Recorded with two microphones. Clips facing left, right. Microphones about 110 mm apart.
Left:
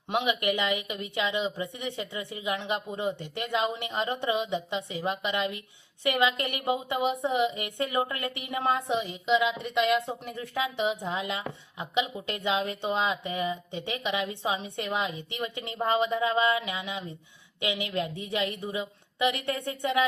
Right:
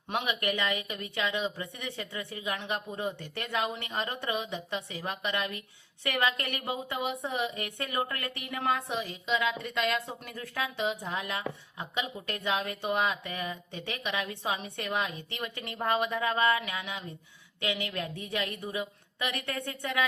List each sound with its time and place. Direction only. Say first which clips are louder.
0.1 s speech: left 4 dB; 15° left (ahead or behind)